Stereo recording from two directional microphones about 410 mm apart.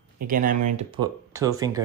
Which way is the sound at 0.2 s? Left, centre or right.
Right.